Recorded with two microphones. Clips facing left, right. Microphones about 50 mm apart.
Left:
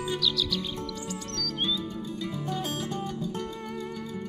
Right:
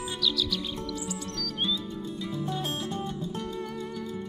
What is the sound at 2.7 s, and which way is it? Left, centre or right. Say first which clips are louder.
Music: even; right.